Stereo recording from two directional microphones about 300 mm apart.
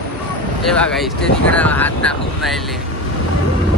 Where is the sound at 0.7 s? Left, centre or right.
Centre.